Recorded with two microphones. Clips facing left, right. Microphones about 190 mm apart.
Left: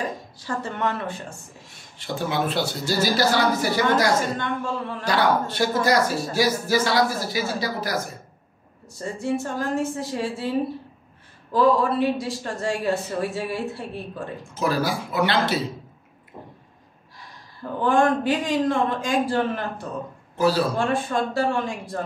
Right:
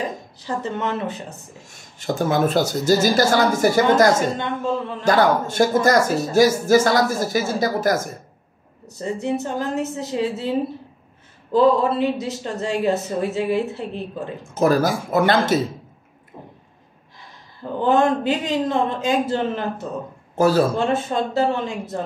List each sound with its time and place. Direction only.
0.5 s speech: 20° right (ahead or behind)
1.6 s speech: 45° right (ahead or behind)
4.4 s speech: 20° right (ahead or behind)
5.0 s speech: 45° right (ahead or behind)
8.8 s speech: 20° right (ahead or behind)
11.5 s speech: 25° right (ahead or behind)
14.5 s speech: 45° right (ahead or behind)
17.8 s speech: 20° right (ahead or behind)
20.3 s speech: 50° right (ahead or behind)
20.7 s speech: 20° right (ahead or behind)